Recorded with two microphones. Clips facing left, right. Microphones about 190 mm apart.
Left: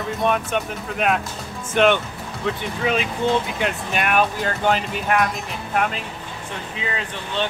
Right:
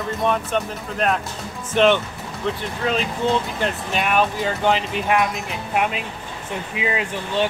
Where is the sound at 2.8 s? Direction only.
10° left (ahead or behind).